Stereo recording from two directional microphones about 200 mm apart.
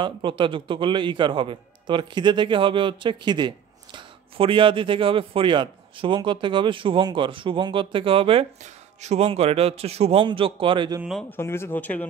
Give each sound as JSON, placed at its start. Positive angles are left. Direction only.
{"t": 0.0, "sound": "a man's voice", "side_deg": -25}
{"t": 11.0, "sound": "speech", "side_deg": 0}
{"t": 11.2, "sound": "speech", "side_deg": 10}